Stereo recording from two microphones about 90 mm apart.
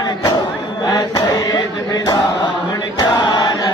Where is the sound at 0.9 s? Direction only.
45° left (ahead or behind).